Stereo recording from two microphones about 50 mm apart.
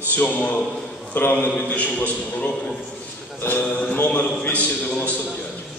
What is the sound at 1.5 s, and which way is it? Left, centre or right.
A man's voice, left.